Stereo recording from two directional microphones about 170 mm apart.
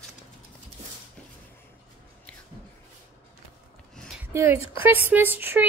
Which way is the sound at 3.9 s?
5° left (ahead or behind).